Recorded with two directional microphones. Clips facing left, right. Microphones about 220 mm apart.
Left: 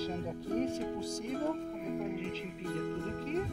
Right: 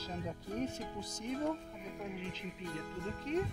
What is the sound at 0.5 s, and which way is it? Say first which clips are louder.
Music: left 6 dB; 30° left (ahead or behind).